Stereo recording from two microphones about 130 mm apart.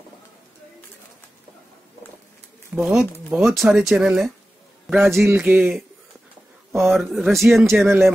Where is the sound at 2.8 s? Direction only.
5° right (ahead or behind).